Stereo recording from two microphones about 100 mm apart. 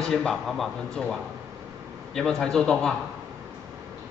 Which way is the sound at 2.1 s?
5° left (ahead or behind).